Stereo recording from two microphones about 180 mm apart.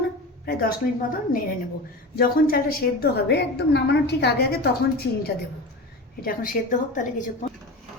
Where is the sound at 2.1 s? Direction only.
55° left (ahead or behind).